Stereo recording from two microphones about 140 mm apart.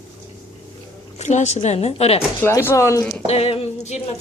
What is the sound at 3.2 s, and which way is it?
Speech, 45° left (ahead or behind).